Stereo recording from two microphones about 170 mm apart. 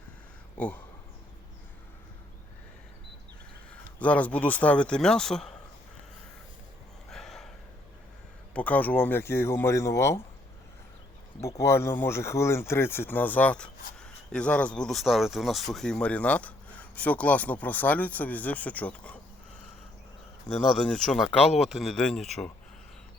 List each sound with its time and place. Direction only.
0.5 s speech: 10° left (ahead or behind)
3.7 s speech: 10° left (ahead or behind)
7.1 s a sound: centre (ahead or behind)
8.5 s speech: 10° left (ahead or behind)
11.4 s speech: 15° left (ahead or behind)
20.5 s speech: 45° left (ahead or behind)
20.8 s speech: 5° left (ahead or behind)
21.2 s speech: 35° left (ahead or behind)
21.6 s speech: centre (ahead or behind)